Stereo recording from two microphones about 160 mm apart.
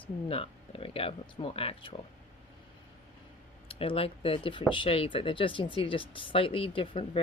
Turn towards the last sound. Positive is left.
turn(degrees=35)  # may be behind; listen again after turning